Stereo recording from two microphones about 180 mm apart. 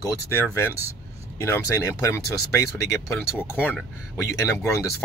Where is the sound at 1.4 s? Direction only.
15° left (ahead or behind).